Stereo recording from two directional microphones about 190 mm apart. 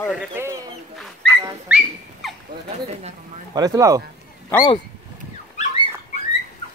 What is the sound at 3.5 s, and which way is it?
Speech, 20° right (ahead or behind).